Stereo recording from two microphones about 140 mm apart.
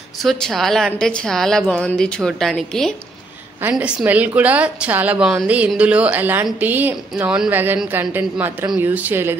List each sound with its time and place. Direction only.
0.2 s a woman's voice: centre (ahead or behind)
3.7 s a woman's voice: 10° right (ahead or behind)